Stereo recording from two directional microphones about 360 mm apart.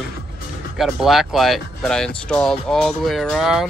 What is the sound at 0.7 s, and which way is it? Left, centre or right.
Speech, centre.